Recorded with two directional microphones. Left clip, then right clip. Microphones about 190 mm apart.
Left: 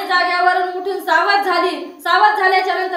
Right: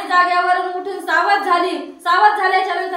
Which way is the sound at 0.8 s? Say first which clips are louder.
Left 3 dB; 20° left (ahead or behind).